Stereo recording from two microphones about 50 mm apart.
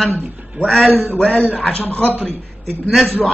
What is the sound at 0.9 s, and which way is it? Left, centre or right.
Speech, right.